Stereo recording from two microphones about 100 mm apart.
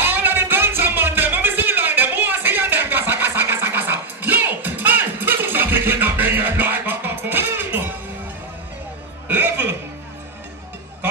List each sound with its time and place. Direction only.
0.0 s music: 20° right (ahead or behind)
9.3 s music: 20° right (ahead or behind)